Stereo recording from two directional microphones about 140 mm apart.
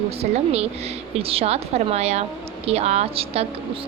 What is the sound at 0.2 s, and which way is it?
A woman's voice, 45° right (ahead or behind).